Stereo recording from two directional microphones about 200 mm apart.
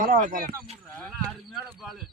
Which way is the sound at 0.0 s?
45° right (ahead or behind).